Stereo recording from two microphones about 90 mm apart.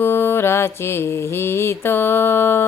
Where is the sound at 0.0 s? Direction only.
25° left (ahead or behind).